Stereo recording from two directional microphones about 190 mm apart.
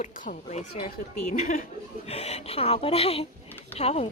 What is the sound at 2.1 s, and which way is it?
A woman's voice, 35° left (ahead or behind).